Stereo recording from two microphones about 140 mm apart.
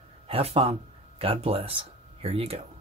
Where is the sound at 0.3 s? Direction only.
45° right (ahead or behind).